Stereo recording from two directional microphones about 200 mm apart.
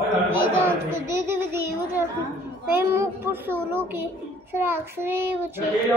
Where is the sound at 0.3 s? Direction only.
15° right (ahead or behind).